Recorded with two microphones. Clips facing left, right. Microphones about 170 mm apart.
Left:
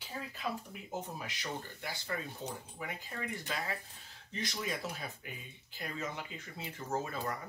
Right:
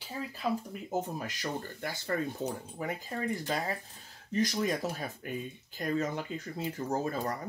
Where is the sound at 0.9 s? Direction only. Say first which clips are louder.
Right 7 dB; 45° right (ahead or behind).